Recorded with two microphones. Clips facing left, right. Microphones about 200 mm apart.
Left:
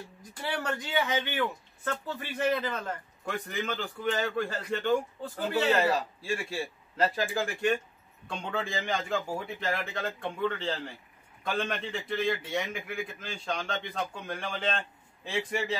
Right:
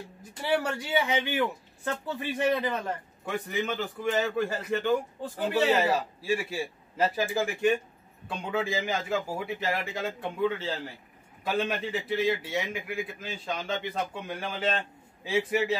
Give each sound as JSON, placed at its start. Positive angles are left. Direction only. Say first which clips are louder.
{"t": 0.2, "sound": "a man's voice", "louder": "right 7 dB", "side_deg": -10}
{"t": 3.3, "sound": "a man's voice", "louder": "right 3 dB", "side_deg": -5}